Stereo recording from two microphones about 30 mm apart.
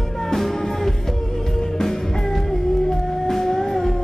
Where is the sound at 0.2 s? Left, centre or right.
Centre.